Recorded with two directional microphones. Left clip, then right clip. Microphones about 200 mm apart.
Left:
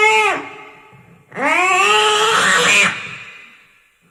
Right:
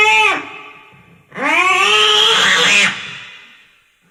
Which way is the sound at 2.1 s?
50° left (ahead or behind).